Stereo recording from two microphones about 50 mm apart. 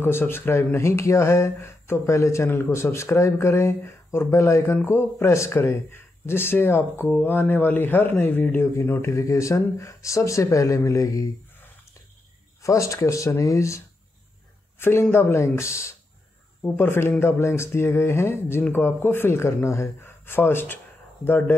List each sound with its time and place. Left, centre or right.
0.0 s a man's voice: left
0.7 s speech: left
4.8 s a man's voice: left
9.0 s speech: left
12.6 s speech: left
14.8 s a man's voice: left
15.4 s speech: left
16.8 s a man's voice: left
17.2 s speech: left
18.7 s a man's voice: left
20.0 s a sound: left